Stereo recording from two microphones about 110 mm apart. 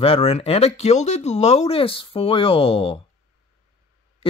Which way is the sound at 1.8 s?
55° left (ahead or behind).